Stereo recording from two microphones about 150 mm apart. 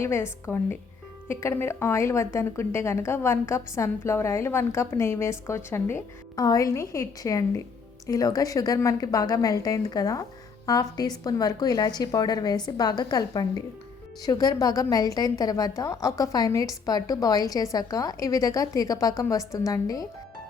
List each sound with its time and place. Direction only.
0.0 s a woman's voice: 15° left (ahead or behind)